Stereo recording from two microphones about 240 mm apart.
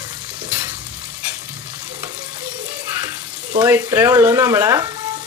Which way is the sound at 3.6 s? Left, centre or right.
Centre.